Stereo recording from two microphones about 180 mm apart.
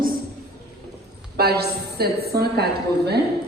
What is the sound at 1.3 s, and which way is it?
A woman's voice, 60° right (ahead or behind).